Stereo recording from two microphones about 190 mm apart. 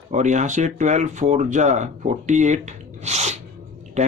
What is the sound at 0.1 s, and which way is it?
Speech, 40° right (ahead or behind).